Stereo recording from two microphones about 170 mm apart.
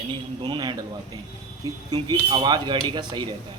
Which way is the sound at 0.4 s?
25° right (ahead or behind).